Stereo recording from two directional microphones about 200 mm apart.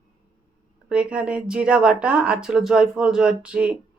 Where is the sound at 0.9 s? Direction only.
5° right (ahead or behind).